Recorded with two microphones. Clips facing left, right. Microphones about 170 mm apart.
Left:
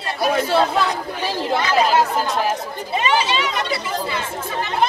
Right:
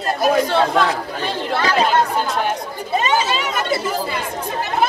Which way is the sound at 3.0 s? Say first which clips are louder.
Left 1 dB; 45° right (ahead or behind).